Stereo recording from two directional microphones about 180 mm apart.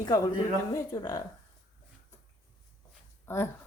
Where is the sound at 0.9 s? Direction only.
20° left (ahead or behind).